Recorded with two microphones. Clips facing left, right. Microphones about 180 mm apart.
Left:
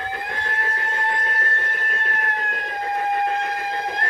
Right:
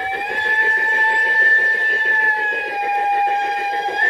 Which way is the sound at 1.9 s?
30° right (ahead or behind).